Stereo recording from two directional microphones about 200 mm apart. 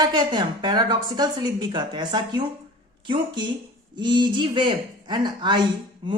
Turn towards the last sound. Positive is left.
turn(degrees=-20)  # may be behind; listen again after turning